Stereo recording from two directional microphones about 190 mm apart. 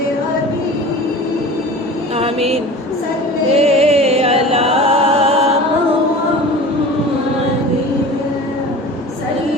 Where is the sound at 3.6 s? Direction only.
35° right (ahead or behind).